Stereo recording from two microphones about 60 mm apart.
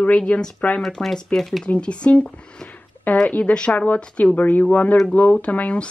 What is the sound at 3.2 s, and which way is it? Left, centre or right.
Speech, left.